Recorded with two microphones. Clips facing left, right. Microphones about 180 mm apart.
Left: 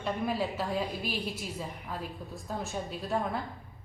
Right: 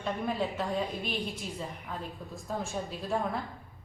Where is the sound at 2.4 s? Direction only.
Centre (ahead or behind).